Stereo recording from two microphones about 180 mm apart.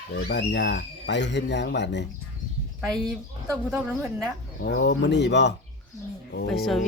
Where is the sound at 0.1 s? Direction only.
65° left (ahead or behind).